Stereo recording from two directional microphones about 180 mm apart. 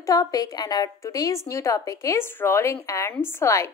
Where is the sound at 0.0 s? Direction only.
20° left (ahead or behind).